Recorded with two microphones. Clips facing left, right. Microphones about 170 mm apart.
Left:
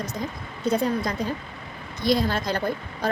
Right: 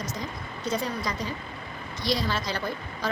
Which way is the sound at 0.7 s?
55° left (ahead or behind).